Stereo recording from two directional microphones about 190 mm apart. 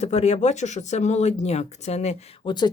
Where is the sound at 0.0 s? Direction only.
35° left (ahead or behind).